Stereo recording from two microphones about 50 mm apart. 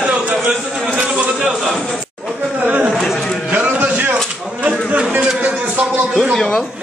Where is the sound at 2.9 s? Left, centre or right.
Centre.